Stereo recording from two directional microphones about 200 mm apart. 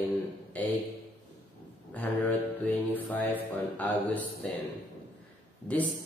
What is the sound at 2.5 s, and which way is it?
Mantra, 10° left (ahead or behind).